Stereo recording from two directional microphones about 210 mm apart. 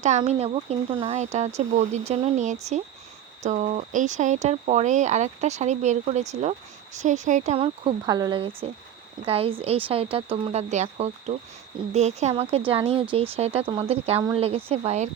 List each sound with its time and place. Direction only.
0.0 s speech: 35° right (ahead or behind)